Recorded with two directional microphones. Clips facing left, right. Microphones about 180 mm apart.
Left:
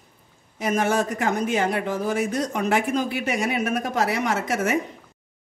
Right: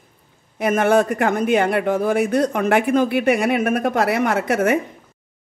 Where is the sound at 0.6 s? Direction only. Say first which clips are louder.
Right 6 dB; 60° right (ahead or behind).